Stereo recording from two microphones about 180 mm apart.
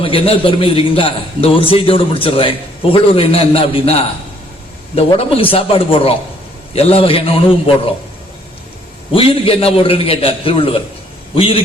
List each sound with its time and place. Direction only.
0.0 s a man's voice: 30° left (ahead or behind)
9.1 s a man's voice: 30° left (ahead or behind)